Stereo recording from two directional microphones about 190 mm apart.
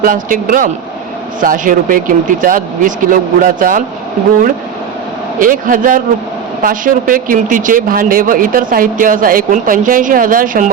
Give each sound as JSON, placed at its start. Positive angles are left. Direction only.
{"t": 0.0, "sound": "speech", "side_deg": -45}
{"t": 5.4, "sound": "speech", "side_deg": -45}